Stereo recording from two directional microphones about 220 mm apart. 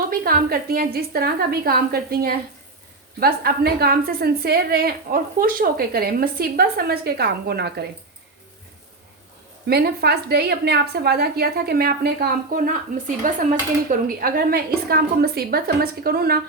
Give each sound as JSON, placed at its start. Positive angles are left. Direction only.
{"t": 0.1, "sound": "a woman's voice", "side_deg": -40}
{"t": 9.6, "sound": "a woman's voice", "side_deg": -45}